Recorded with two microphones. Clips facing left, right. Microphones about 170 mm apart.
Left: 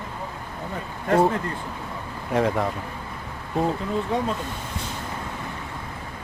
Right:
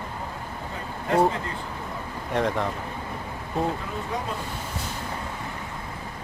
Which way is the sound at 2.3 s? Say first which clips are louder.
Left 3 dB; 5° left (ahead or behind).